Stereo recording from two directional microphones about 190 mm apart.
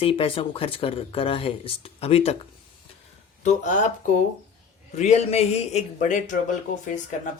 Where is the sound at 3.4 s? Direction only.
40° left (ahead or behind).